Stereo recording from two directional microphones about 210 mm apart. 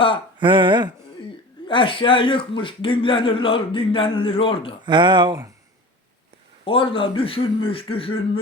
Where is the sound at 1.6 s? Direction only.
25° left (ahead or behind).